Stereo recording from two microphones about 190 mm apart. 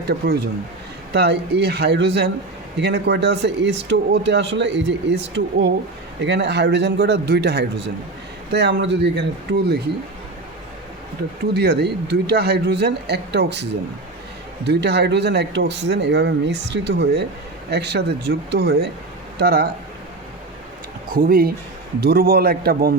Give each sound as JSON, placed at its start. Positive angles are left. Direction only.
{"t": 0.1, "sound": "speech", "side_deg": -55}
{"t": 11.5, "sound": "speech", "side_deg": -60}
{"t": 21.1, "sound": "speech", "side_deg": -50}